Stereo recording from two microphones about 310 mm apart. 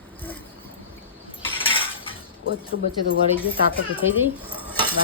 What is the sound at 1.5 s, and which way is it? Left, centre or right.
Cutlery, centre.